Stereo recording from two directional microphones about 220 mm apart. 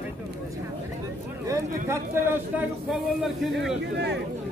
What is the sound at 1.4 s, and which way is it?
Speech, 10° right (ahead or behind).